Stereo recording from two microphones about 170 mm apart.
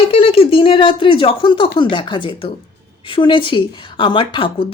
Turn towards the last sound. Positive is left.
turn(degrees=30)  # may be behind; listen again after turning